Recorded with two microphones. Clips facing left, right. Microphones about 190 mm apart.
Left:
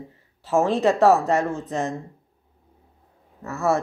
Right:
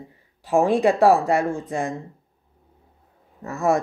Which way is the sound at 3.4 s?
15° right (ahead or behind).